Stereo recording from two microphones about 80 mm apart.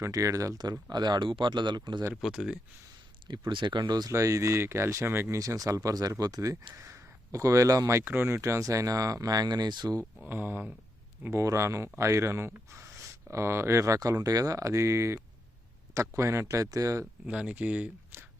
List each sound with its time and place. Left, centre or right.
0.0 s speech: right
2.2 s speech: centre
3.5 s speech: right
4.1 s speech: right
5.4 s speech: right
8.0 s speech: right
10.2 s speech: right
17.2 s speech: centre